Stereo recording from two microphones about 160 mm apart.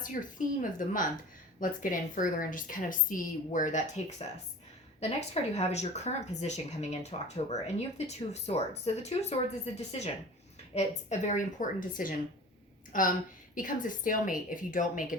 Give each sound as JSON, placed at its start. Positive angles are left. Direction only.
{"t": 0.0, "sound": "a woman's voice", "side_deg": 55}
{"t": 10.8, "sound": "a woman's voice", "side_deg": 45}